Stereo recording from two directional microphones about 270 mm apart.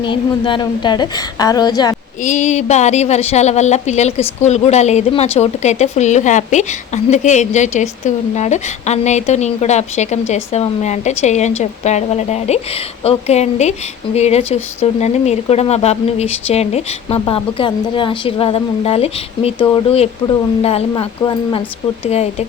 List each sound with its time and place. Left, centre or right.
0.0 s a woman's voice: centre
2.2 s a woman's voice: left